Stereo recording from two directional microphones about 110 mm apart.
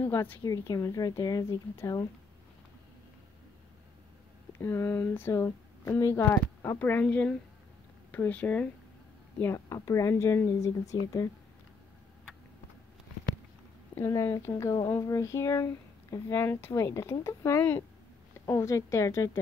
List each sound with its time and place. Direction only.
0.0 s speech: 20° left (ahead or behind)
0.4 s speech: 30° left (ahead or behind)
4.5 s speech: 20° left (ahead or behind)
9.4 s speech: 25° left (ahead or behind)
13.9 s speech: 25° left (ahead or behind)